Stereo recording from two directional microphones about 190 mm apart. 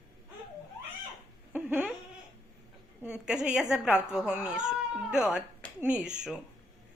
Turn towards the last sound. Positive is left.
turn(degrees=-5)  # may be behind; listen again after turning